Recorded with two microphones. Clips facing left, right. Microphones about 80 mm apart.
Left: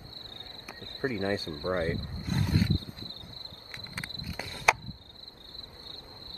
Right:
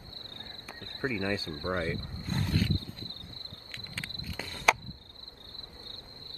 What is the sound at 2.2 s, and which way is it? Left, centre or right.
Wild animals, centre.